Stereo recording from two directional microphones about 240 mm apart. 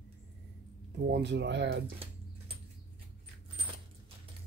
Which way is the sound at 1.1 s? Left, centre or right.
Right.